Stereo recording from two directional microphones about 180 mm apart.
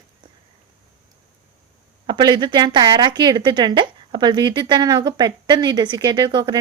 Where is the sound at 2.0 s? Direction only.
25° right (ahead or behind).